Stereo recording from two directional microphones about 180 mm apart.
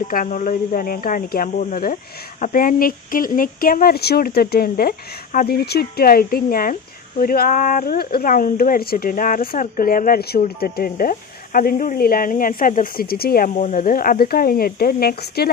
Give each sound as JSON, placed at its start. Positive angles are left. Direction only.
{"t": 0.1, "sound": "speech", "side_deg": 45}